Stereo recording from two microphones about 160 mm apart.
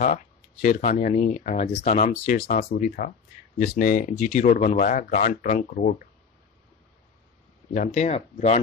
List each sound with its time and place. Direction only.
0.0 s speech: 55° left (ahead or behind)
2.3 s speech: 60° left (ahead or behind)
4.1 s speech: 45° left (ahead or behind); by 6.0 s 65° left (ahead or behind)
7.7 s speech: 45° left (ahead or behind)